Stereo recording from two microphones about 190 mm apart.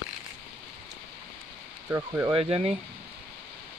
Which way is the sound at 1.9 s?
15° right (ahead or behind).